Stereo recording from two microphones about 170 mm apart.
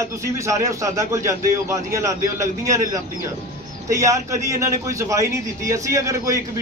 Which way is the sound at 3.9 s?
20° right (ahead or behind).